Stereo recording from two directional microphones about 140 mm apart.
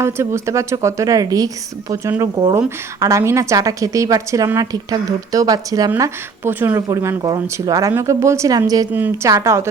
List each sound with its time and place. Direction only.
0.0 s a woman's voice: 20° right (ahead or behind)
6.0 s a woman's voice: 15° right (ahead or behind)
8.9 s a woman's voice: 15° right (ahead or behind)